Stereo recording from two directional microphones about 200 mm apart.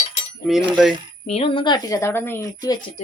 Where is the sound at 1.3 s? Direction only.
30° left (ahead or behind).